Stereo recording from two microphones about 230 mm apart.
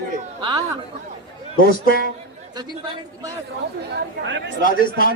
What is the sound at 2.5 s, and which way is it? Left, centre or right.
Speech, centre.